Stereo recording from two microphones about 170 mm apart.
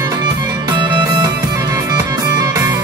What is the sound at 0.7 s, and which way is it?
Music, 25° right (ahead or behind).